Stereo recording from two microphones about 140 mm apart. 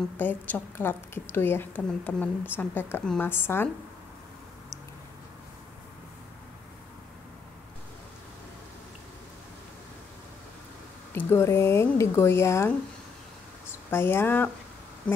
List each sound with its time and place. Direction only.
0.2 s a woman's voice: 15° left (ahead or behind)
11.1 s a woman's voice: 15° left (ahead or behind)
13.8 s a woman's voice: 15° left (ahead or behind)